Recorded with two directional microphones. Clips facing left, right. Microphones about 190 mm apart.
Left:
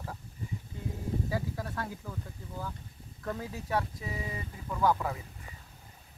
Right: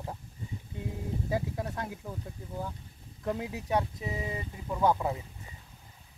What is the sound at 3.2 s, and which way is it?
Speech, 15° right (ahead or behind).